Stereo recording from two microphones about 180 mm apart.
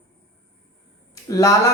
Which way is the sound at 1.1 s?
15° left (ahead or behind).